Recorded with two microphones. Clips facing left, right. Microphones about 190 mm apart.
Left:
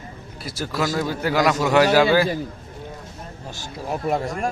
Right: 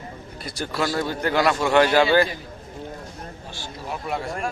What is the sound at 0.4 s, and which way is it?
A man's voice, 5° left (ahead or behind).